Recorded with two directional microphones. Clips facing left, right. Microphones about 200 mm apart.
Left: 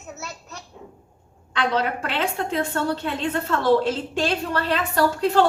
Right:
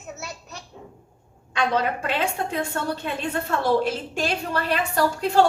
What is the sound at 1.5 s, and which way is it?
A woman's voice, 15° right (ahead or behind).